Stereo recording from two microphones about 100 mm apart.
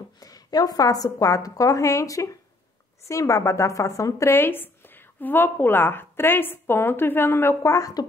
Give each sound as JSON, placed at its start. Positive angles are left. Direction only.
{"t": 0.2, "sound": "a woman's voice", "side_deg": 40}